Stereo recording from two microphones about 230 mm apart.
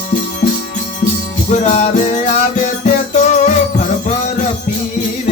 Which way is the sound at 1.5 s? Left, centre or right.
Left.